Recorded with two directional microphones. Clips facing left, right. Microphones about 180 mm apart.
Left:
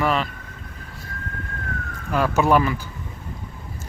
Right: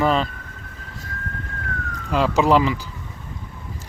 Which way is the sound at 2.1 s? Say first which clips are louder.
Right 1 dB; 15° right (ahead or behind).